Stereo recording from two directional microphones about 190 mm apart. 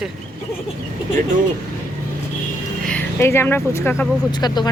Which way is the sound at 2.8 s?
10° left (ahead or behind).